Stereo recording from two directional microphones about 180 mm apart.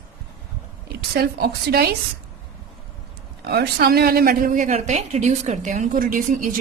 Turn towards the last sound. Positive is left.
turn(degrees=-50)  # may be behind; listen again after turning